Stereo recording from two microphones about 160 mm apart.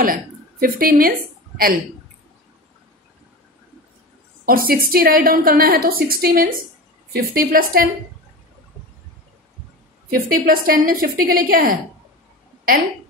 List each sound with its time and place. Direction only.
0.0 s a woman's voice: 60° right (ahead or behind)
4.5 s a woman's voice: 65° right (ahead or behind)
10.0 s a woman's voice: 65° right (ahead or behind)